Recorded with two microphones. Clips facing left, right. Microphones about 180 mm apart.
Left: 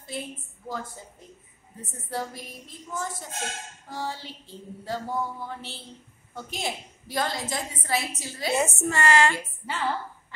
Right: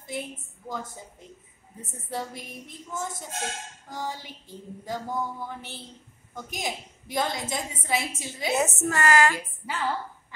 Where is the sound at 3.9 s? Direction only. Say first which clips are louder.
Left 1 dB; 15° right (ahead or behind).